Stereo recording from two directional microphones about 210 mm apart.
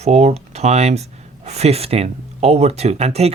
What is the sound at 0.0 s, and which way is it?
Speech, 30° right (ahead or behind).